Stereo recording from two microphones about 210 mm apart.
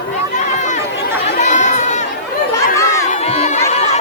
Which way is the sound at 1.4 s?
35° left (ahead or behind).